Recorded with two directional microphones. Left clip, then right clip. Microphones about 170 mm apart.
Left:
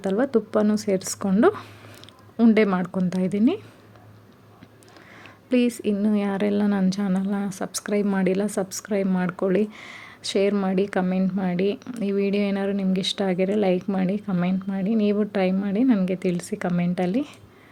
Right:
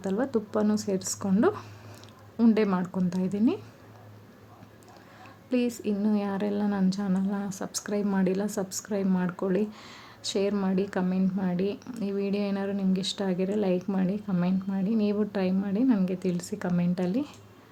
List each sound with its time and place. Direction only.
0.0 s a woman's voice: 20° left (ahead or behind)
5.5 s a woman's voice: 20° left (ahead or behind)